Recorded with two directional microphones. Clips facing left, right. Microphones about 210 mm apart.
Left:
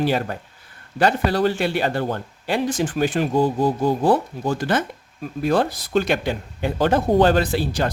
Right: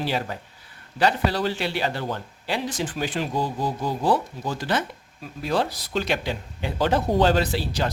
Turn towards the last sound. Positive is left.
turn(degrees=50)  # may be behind; listen again after turning